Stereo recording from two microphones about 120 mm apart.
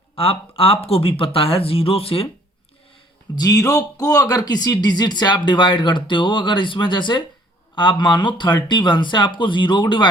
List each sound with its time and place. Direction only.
0.2 s speech: 50° left (ahead or behind)
3.3 s speech: 30° left (ahead or behind)